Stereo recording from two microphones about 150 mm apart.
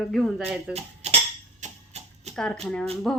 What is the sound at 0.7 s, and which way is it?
Speech, 45° right (ahead or behind).